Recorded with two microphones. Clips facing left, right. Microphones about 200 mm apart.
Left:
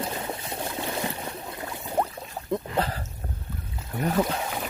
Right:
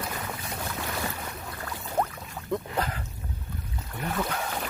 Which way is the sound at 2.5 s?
30° left (ahead or behind).